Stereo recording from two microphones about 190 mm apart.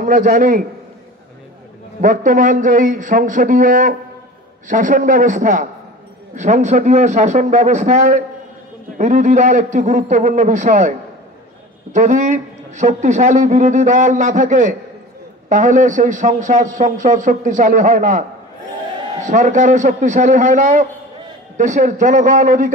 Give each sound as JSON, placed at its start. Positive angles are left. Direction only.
{"t": 0.0, "sound": "a man's voice", "side_deg": -40}
{"t": 2.0, "sound": "a man's voice", "side_deg": -45}
{"t": 11.9, "sound": "a man's voice", "side_deg": -40}
{"t": 19.2, "sound": "a man's voice", "side_deg": -40}